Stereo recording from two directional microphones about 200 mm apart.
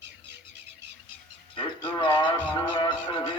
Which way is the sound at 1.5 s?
25° left (ahead or behind).